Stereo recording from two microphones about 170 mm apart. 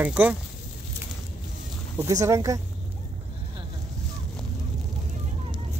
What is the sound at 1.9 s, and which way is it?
Speech, 20° right (ahead or behind).